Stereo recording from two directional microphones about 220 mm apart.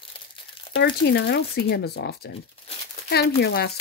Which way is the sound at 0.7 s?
50° left (ahead or behind).